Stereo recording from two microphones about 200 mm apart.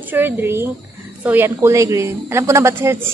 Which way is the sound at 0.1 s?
10° right (ahead or behind).